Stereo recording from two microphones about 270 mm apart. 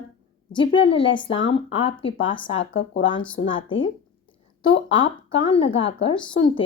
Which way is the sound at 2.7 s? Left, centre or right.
Left.